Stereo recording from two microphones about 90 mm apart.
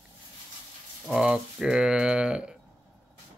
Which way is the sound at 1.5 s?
5° right (ahead or behind).